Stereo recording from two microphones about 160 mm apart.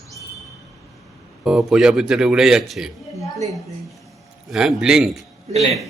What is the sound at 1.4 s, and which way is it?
Speech, centre (ahead or behind).